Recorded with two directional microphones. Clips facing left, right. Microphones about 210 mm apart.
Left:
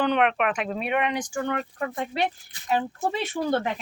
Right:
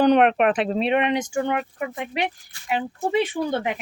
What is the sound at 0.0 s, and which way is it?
Speech, 40° right (ahead or behind).